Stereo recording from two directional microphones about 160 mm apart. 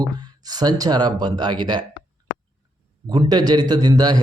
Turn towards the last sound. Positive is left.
turn(degrees=-25)  # may be behind; listen again after turning